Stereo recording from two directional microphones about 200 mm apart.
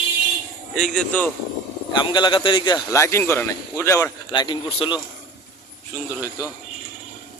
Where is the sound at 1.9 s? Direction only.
25° left (ahead or behind).